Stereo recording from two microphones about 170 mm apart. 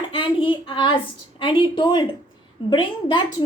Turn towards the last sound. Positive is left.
turn(degrees=25)  # may be behind; listen again after turning